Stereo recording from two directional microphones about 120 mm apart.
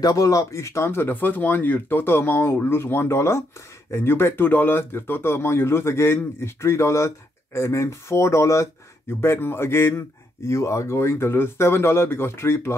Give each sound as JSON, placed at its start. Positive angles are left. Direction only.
{"t": 0.0, "sound": "speech", "side_deg": 30}